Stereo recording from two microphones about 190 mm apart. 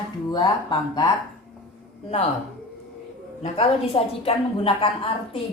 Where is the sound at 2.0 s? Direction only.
30° left (ahead or behind).